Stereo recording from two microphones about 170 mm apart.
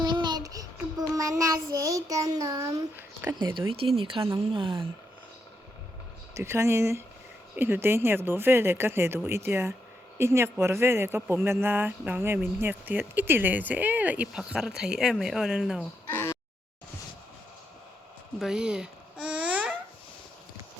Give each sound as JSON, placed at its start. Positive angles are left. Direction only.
{"t": 0.0, "sound": "child singing", "side_deg": -25}
{"t": 3.3, "sound": "child singing", "side_deg": -30}
{"t": 3.9, "sound": "a woman's voice", "side_deg": -30}
{"t": 6.3, "sound": "speech", "side_deg": -15}
{"t": 16.0, "sound": "a sound", "side_deg": 15}
{"t": 18.3, "sound": "babbling", "side_deg": -5}